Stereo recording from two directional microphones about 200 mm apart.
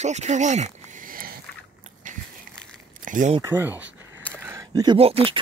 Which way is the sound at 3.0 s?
40° right (ahead or behind).